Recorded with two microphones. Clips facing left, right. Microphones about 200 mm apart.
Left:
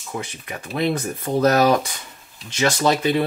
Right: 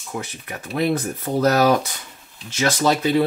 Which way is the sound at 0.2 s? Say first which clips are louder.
Even; 15° left (ahead or behind).